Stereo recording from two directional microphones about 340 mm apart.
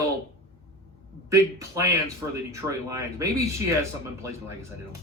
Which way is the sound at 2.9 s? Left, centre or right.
Centre.